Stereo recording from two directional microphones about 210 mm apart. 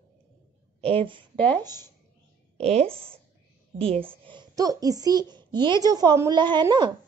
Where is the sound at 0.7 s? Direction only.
25° right (ahead or behind).